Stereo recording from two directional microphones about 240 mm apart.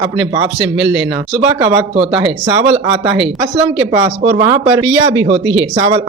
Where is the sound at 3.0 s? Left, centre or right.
Centre.